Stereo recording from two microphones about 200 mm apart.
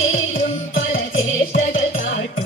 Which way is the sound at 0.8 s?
70° left (ahead or behind).